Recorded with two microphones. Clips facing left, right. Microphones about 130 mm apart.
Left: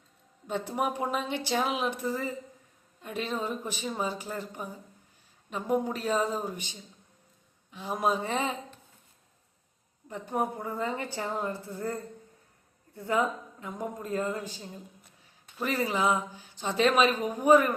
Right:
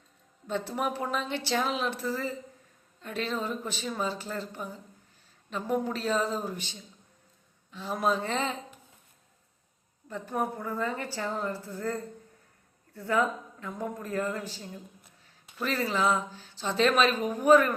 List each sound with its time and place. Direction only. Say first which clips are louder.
0.4 s speech: left 1 dB; 15° left (ahead or behind)
10.1 s a woman's voice: left 1 dB; 20° left (ahead or behind)